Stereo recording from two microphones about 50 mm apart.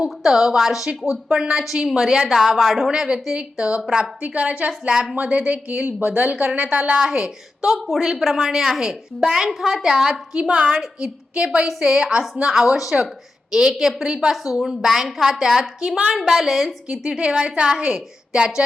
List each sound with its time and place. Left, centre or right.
0.2 s a woman's voice: centre
2.9 s a woman's voice: centre
7.0 s a woman's voice: centre
7.8 s a woman's voice: centre
16.9 s a woman's voice: centre